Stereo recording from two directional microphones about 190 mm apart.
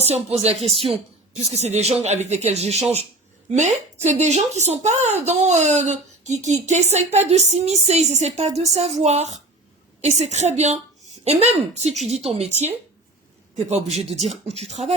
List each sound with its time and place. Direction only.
0.0 s a woman's voice: 35° right (ahead or behind)
13.7 s a woman's voice: 35° right (ahead or behind)